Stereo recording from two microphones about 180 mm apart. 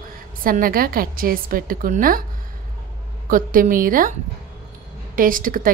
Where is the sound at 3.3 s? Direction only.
50° right (ahead or behind).